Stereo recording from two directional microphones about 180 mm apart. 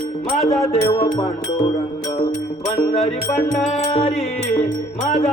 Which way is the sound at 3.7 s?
35° left (ahead or behind).